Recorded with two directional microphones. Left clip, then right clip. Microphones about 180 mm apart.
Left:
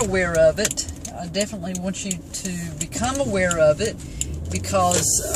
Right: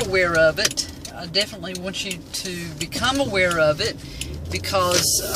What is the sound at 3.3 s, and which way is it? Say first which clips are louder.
Speech: left 2 dB; 10° left (ahead or behind).